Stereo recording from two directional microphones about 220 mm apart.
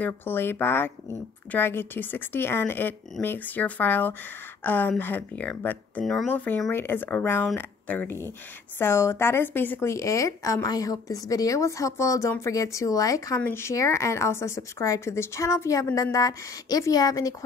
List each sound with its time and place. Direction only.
0.0 s a woman's voice: 10° left (ahead or behind)